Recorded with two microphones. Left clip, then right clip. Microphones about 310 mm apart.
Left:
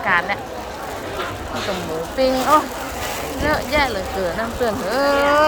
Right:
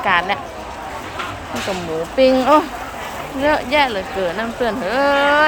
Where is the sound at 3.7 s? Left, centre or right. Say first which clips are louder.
Right 2 dB; centre.